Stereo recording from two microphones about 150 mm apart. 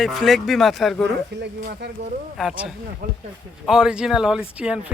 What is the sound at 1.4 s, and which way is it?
Speech, 90° right.